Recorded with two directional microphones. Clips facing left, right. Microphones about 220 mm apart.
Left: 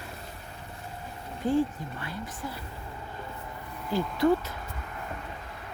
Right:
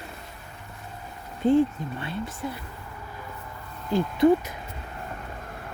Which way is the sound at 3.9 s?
20° right (ahead or behind).